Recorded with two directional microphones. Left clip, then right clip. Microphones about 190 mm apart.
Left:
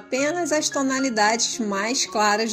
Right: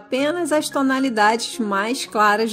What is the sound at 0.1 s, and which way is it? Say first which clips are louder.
A woman's voice: right 3 dB; 50° right (ahead or behind).